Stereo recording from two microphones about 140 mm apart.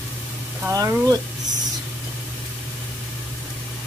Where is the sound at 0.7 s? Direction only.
25° right (ahead or behind).